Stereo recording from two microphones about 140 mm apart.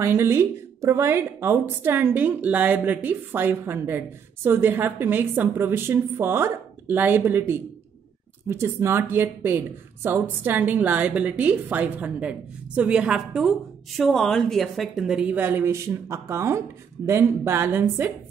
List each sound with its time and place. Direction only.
0.0 s a woman's voice: 20° right (ahead or behind)